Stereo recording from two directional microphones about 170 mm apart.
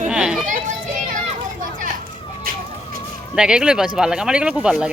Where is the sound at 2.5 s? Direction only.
55° right (ahead or behind).